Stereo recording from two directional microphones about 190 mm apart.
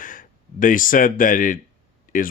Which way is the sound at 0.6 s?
45° left (ahead or behind).